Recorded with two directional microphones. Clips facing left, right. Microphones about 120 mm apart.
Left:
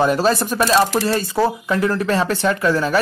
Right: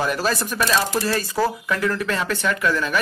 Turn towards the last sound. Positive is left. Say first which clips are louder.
# left 4 dB
turn(degrees=35)  # may be behind; listen again after turning